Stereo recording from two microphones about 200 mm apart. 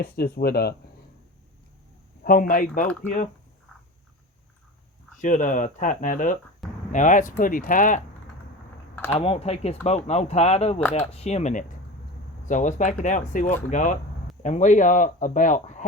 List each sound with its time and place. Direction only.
0.0 s speech: 50° left (ahead or behind)
2.2 s speech: 45° left (ahead or behind)
5.2 s speech: 40° left (ahead or behind)
9.1 s speech: 30° left (ahead or behind)